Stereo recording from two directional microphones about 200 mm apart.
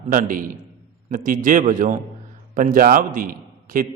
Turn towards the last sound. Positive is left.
turn(degrees=-45)  # may be behind; listen again after turning